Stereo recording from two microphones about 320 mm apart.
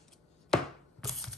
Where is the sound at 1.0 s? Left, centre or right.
Centre.